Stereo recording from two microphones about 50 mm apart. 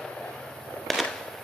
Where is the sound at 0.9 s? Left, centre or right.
Centre.